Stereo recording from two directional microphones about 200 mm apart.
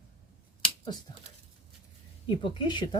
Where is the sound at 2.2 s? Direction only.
25° left (ahead or behind).